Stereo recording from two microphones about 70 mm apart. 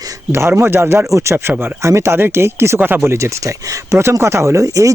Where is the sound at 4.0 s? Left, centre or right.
Right.